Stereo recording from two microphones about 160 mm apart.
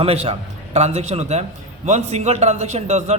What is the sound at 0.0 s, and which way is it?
A man's voice, 40° right (ahead or behind).